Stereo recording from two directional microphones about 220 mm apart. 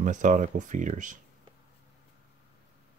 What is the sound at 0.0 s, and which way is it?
Speech, 35° right (ahead or behind).